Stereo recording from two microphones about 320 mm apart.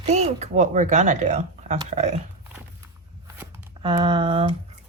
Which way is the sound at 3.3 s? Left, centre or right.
Centre.